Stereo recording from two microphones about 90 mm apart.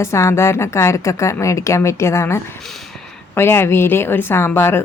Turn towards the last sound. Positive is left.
turn(degrees=25)  # may be behind; listen again after turning